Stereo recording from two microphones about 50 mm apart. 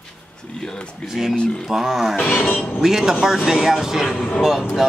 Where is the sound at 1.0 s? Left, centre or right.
Centre.